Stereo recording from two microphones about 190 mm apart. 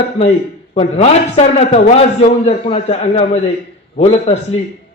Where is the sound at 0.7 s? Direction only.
35° left (ahead or behind).